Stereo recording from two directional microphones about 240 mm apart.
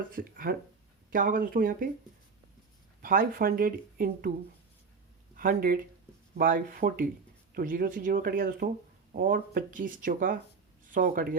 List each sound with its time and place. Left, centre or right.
0.1 s speech: right
3.0 s speech: right
5.4 s speech: right